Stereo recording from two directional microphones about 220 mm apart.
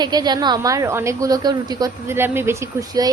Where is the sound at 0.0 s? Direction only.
20° right (ahead or behind).